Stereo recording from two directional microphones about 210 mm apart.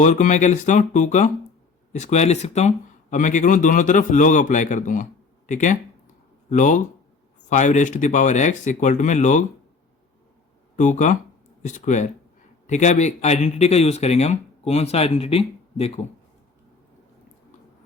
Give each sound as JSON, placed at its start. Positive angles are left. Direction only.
{"t": 0.0, "sound": "speech", "side_deg": 35}
{"t": 10.8, "sound": "speech", "side_deg": 35}